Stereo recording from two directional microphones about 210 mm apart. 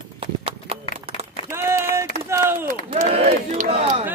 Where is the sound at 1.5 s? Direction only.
10° right (ahead or behind).